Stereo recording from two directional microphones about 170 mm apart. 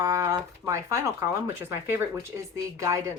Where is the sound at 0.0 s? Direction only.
20° right (ahead or behind).